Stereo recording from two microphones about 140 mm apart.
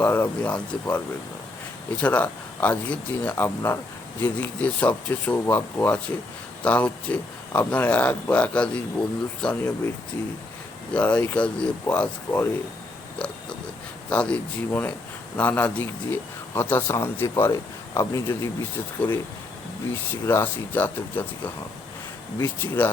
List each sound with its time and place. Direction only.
0.0 s a man's voice: 15° left (ahead or behind)
10.9 s a man's voice: 10° left (ahead or behind)
13.1 s oink: 5° left (ahead or behind)
14.1 s a man's voice: 10° left (ahead or behind)
20.2 s a man's voice: 15° left (ahead or behind)